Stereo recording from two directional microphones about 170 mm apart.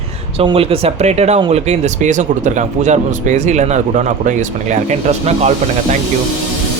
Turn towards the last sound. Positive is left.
turn(degrees=-40)  # may be behind; listen again after turning